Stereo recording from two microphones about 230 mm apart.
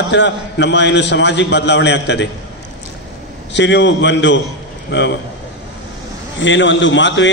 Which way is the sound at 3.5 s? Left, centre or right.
Left.